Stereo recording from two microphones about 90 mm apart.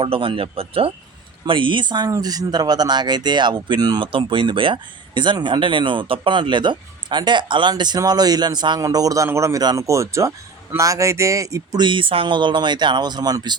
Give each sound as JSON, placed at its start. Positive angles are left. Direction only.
{"t": 0.0, "sound": "speech", "side_deg": -80}
{"t": 1.5, "sound": "speech", "side_deg": -65}
{"t": 2.0, "sound": "speech", "side_deg": -40}
{"t": 4.0, "sound": "speech", "side_deg": -70}
{"t": 8.8, "sound": "speech", "side_deg": -40}
{"t": 11.8, "sound": "speech", "side_deg": -65}